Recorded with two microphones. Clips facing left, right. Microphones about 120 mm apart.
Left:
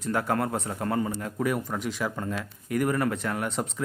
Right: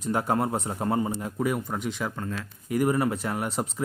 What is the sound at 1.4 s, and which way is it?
Speech, centre (ahead or behind).